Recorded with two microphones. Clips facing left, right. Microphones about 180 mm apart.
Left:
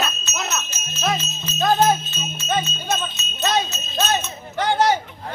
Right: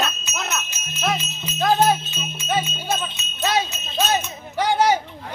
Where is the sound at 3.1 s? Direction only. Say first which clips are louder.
Even; 10° right (ahead or behind).